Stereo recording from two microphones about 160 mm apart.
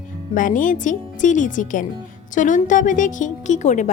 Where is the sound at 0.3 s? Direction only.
55° left (ahead or behind).